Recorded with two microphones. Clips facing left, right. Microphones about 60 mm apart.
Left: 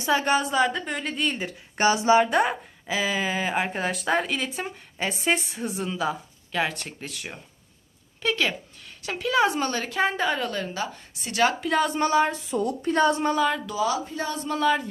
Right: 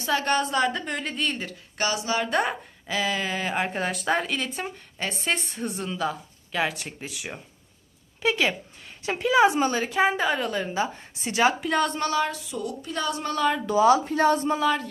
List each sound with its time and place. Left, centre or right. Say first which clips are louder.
0.1 s a woman's voice: left 1 dB; centre
1.8 s speech: left 7 dB; left
2.3 s a woman's voice: left 2 dB; centre
9.0 s a woman's voice: right 3 dB; right
10.8 s a woman's voice: right 4 dB; right
11.4 s a woman's voice: even; centre
11.9 s speech: left 4 dB; left
13.3 s a woman's voice: left 1 dB; centre
13.7 s speech: right 7 dB; right
14.0 s speech: right 9 dB; right